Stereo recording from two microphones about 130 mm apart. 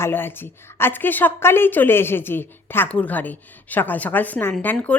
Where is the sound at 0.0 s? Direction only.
15° left (ahead or behind).